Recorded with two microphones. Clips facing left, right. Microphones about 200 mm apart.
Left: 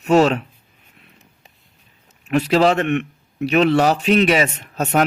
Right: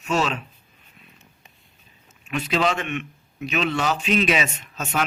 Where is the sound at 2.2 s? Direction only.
65° left (ahead or behind).